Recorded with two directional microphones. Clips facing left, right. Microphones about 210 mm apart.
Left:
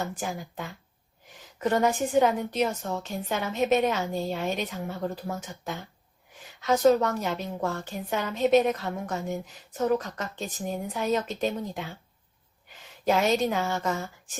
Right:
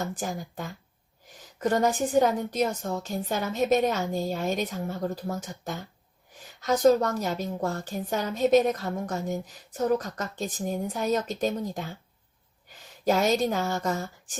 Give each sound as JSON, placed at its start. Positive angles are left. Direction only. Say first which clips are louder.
{"t": 0.0, "sound": "a woman's voice", "louder": "right 1 dB", "side_deg": -40}
{"t": 13.1, "sound": "a woman's voice", "louder": "even", "side_deg": -40}